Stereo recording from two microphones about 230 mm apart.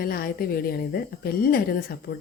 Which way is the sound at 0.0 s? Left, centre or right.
Left.